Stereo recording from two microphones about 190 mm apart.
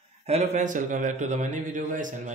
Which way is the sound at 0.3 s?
35° right (ahead or behind).